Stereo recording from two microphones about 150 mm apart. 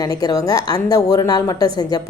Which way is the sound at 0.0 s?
25° left (ahead or behind).